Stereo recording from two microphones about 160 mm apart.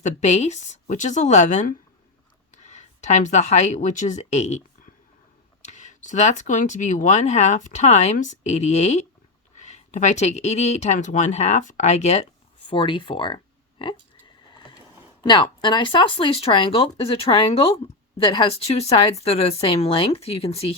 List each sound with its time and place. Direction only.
0.0 s speech: 45° left (ahead or behind)
3.0 s speech: 50° left (ahead or behind)
6.0 s speech: 50° left (ahead or behind)
12.7 s speech: 30° left (ahead or behind)
15.2 s speech: 30° left (ahead or behind)